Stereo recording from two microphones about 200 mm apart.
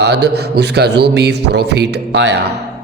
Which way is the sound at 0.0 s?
55° right (ahead or behind).